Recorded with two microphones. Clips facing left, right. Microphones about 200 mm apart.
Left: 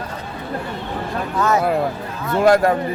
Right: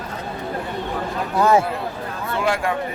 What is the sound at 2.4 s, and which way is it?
Speech, 40° left (ahead or behind).